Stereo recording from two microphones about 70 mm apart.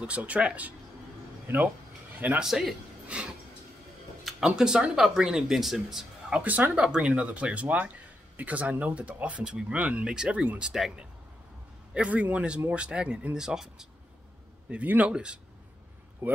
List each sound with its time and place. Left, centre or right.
0.0 s speech: centre
2.1 s a man's voice: right
2.4 s speech: centre
4.2 s a sound: centre
4.5 s speech: centre
6.4 s speech: right
6.7 s speech: centre
10.7 s speech: centre
11.9 s speech: centre
14.7 s speech: right
16.2 s speech: right